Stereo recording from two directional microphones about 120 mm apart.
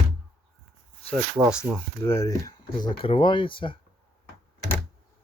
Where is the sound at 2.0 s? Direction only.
25° left (ahead or behind).